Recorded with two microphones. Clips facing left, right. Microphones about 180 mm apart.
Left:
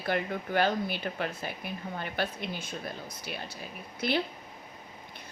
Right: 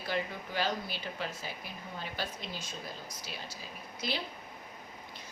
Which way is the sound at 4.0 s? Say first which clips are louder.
Left 8 dB; 60° left (ahead or behind).